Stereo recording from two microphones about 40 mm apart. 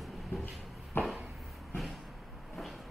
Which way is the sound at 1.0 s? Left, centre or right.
Left.